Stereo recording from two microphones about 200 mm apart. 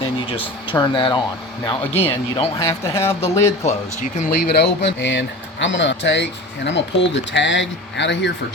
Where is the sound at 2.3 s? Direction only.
20° left (ahead or behind).